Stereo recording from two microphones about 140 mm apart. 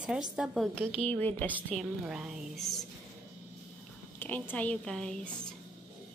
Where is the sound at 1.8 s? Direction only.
5° right (ahead or behind).